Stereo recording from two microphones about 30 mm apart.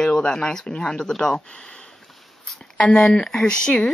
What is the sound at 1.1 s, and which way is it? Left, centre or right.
Speech, centre.